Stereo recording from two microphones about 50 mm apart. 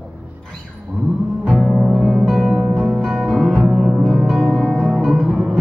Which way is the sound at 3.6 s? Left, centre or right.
Centre.